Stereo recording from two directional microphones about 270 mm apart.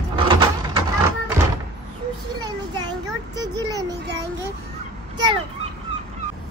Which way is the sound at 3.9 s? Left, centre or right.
Right.